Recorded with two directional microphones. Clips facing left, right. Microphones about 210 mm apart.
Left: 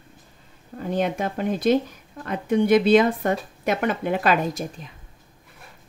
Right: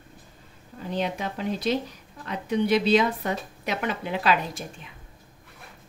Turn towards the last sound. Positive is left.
turn(degrees=45)  # may be behind; listen again after turning